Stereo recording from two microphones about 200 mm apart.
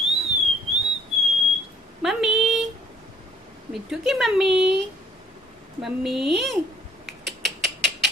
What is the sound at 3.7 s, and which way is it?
Speech, centre (ahead or behind).